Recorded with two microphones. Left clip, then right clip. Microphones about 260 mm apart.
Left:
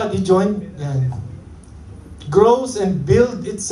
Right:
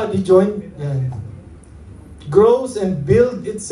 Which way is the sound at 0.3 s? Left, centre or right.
Left.